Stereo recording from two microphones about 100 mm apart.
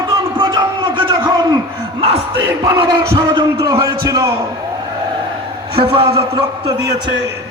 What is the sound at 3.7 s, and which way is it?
Speech, 35° right (ahead or behind).